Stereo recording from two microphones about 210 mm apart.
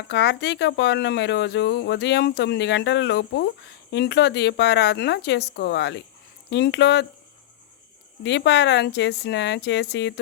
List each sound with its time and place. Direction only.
0.1 s speech: 55° left (ahead or behind)
8.2 s speech: 55° left (ahead or behind)